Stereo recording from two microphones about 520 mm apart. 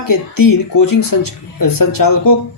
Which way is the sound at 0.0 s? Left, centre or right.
Left.